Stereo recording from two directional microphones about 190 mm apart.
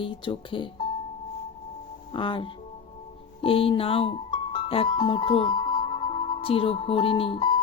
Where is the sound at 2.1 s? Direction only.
25° left (ahead or behind).